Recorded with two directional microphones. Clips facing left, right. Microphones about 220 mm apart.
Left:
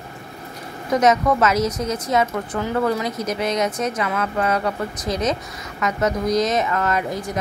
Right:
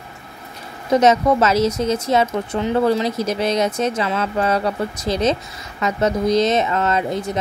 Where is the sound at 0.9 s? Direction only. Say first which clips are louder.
Right 3 dB; 30° right (ahead or behind).